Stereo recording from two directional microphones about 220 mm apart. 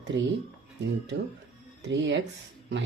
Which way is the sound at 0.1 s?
50° right (ahead or behind).